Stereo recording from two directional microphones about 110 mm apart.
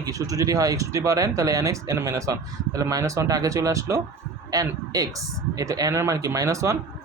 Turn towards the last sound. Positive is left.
turn(degrees=-30)  # may be behind; listen again after turning